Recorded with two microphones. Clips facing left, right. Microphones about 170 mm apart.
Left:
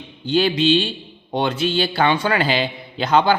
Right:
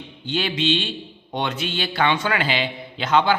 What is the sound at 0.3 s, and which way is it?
A man's voice, 35° left (ahead or behind).